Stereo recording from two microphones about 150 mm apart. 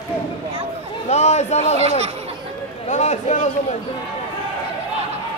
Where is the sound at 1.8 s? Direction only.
45° right (ahead or behind).